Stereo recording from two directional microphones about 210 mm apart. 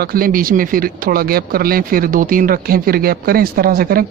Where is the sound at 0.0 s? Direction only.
45° right (ahead or behind).